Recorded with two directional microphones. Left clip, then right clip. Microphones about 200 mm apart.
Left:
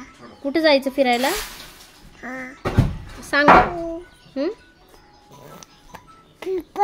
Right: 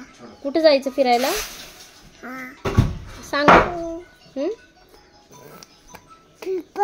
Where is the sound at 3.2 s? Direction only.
35° left (ahead or behind).